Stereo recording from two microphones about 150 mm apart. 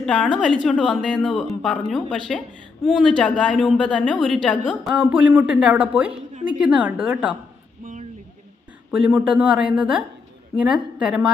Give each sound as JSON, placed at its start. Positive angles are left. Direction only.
{"t": 0.0, "sound": "a woman's voice", "side_deg": 10}
{"t": 4.9, "sound": "speech", "side_deg": -10}
{"t": 7.8, "sound": "a sound", "side_deg": -60}
{"t": 8.9, "sound": "a woman's voice", "side_deg": -10}